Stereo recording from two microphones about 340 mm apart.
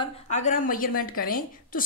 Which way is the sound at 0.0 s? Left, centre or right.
Left.